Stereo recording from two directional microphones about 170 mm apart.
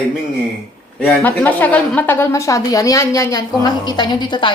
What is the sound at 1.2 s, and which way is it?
A woman's voice, 10° left (ahead or behind).